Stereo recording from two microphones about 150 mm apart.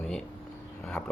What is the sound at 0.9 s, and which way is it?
Speech, 5° left (ahead or behind).